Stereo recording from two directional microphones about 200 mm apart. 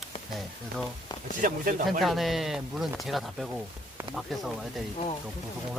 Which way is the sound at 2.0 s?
Centre (ahead or behind).